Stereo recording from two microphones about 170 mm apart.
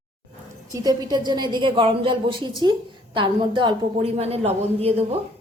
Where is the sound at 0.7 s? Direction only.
20° right (ahead or behind); by 5.0 s 35° right (ahead or behind).